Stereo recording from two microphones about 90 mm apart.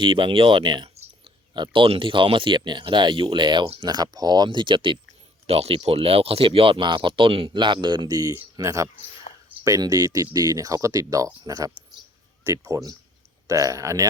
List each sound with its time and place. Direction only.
0.0 s speech: 65° right (ahead or behind)
3.8 s speech: 50° right (ahead or behind)
4.4 s speech: 65° right (ahead or behind)
5.7 s speech: 90° right; by 14.1 s 40° right (ahead or behind)